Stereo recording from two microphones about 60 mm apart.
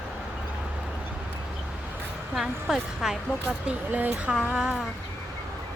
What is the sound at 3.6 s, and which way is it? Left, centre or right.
Speech, right.